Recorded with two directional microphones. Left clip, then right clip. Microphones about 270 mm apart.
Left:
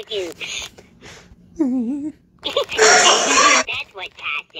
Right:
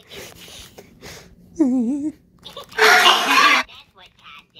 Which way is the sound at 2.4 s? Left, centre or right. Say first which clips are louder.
Left 16 dB; left.